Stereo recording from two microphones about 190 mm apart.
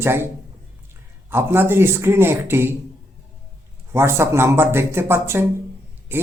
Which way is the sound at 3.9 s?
15° right (ahead or behind).